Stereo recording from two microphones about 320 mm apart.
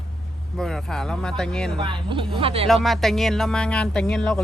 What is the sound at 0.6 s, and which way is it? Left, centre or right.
Speech, centre.